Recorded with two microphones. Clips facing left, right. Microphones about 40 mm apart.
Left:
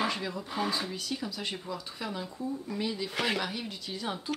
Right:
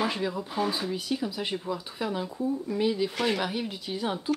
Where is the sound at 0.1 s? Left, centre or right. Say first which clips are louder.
Right 4 dB; centre.